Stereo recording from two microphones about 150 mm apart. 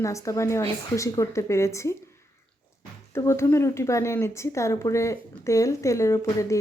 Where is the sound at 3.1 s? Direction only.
15° left (ahead or behind).